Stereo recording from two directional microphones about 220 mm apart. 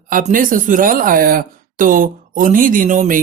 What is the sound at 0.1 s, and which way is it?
Speech, 35° right (ahead or behind).